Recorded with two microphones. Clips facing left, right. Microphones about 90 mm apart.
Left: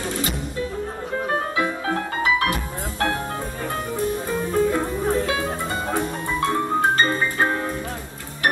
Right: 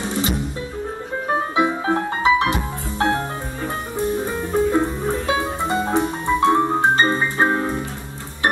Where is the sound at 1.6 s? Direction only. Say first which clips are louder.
Right 4 dB; 20° right (ahead or behind).